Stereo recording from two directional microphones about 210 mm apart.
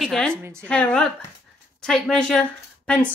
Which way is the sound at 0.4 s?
10° right (ahead or behind).